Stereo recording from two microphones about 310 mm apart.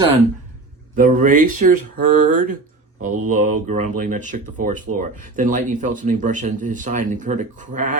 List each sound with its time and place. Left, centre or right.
0.0 s speech: centre